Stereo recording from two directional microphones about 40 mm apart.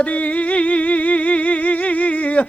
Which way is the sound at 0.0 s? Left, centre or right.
Left.